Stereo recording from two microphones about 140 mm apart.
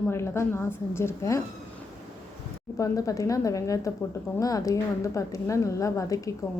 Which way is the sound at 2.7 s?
25° left (ahead or behind).